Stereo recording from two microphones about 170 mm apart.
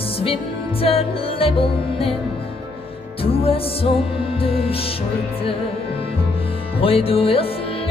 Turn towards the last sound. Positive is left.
turn(degrees=35)  # may be behind; listen again after turning